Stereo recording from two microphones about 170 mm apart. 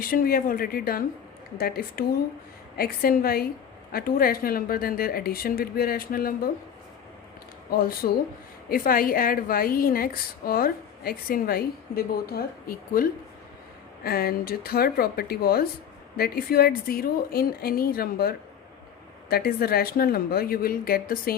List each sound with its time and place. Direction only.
0.0 s a woman's voice: 60° left (ahead or behind)
7.7 s a woman's voice: 60° left (ahead or behind)